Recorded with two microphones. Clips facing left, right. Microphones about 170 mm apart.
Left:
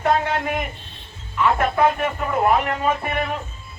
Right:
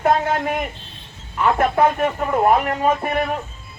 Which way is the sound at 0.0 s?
45° right (ahead or behind).